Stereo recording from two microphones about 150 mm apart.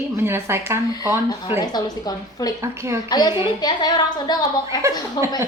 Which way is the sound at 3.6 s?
30° left (ahead or behind).